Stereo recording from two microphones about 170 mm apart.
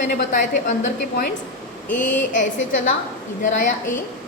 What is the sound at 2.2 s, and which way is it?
A woman's voice, 50° left (ahead or behind).